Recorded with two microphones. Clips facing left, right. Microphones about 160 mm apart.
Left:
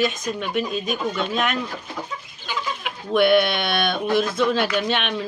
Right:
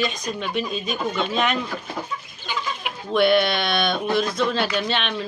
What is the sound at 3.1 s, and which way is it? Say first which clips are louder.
Speech: left 1 dB; 10° left (ahead or behind).